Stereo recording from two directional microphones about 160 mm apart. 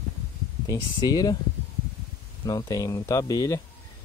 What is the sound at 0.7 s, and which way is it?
Speech, 25° left (ahead or behind).